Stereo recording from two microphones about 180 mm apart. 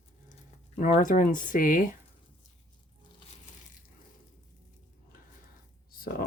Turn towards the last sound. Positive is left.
turn(degrees=50)  # may be behind; listen again after turning